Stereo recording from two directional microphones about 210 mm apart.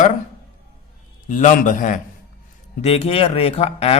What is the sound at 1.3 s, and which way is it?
Speech, 35° left (ahead or behind).